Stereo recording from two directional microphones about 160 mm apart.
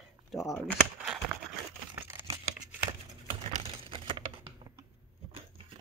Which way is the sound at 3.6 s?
35° right (ahead or behind).